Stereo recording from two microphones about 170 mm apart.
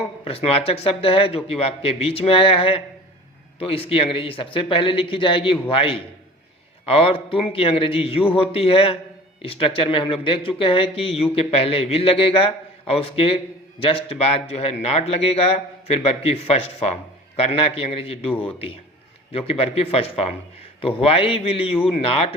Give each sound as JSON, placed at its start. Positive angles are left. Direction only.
{"t": 0.3, "sound": "a man's voice", "side_deg": 35}